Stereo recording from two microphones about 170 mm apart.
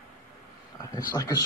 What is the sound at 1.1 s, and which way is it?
Speech, 20° left (ahead or behind).